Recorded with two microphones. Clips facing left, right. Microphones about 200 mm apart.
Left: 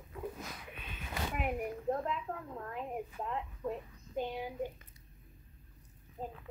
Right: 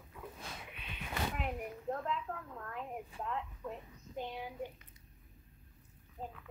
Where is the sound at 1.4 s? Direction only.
15° left (ahead or behind).